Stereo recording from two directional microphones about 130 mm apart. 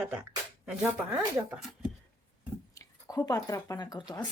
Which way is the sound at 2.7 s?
25° left (ahead or behind).